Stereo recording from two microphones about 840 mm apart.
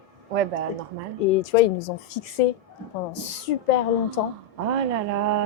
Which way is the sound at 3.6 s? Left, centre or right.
Left.